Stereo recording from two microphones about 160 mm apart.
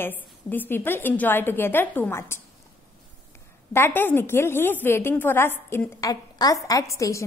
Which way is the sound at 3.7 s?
15° left (ahead or behind).